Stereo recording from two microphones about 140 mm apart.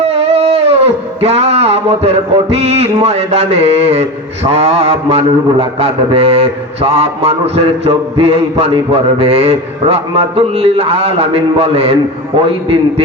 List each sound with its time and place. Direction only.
0.0 s guitar: 45° right (ahead or behind)
1.2 s a man's voice: 45° right (ahead or behind)